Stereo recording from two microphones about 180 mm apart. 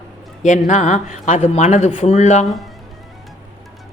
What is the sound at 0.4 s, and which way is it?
Speech, 40° left (ahead or behind).